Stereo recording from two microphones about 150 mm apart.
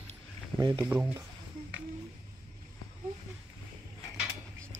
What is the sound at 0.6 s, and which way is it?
Speech, 25° right (ahead or behind).